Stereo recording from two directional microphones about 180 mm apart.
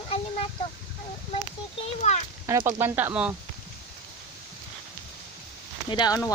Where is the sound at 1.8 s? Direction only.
40° left (ahead or behind).